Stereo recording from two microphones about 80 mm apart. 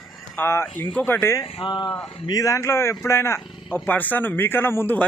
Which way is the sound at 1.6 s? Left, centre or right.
Left.